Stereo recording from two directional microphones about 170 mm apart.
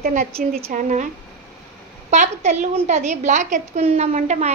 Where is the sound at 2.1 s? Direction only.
40° right (ahead or behind).